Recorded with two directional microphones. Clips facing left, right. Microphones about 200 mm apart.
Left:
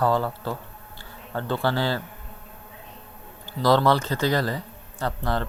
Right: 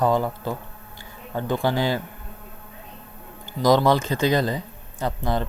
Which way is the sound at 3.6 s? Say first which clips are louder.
Right 2 dB; 15° right (ahead or behind).